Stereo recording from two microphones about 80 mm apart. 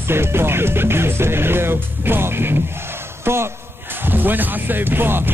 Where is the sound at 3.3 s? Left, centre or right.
Right.